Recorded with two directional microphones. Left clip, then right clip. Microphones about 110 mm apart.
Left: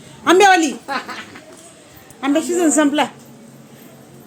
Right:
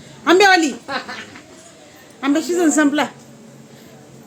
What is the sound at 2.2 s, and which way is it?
Speech, centre (ahead or behind).